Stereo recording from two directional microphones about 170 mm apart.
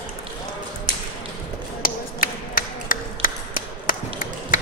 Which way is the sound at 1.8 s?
55° left (ahead or behind).